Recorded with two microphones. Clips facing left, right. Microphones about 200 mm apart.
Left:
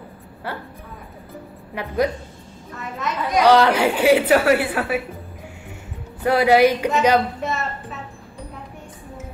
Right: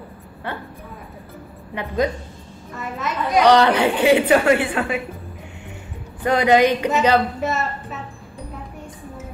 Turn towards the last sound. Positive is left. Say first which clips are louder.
# right 2 dB
turn(degrees=0)  # may be behind; listen again after turning